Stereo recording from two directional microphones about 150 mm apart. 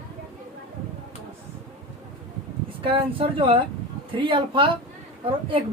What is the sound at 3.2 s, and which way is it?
A woman's voice, 35° right (ahead or behind).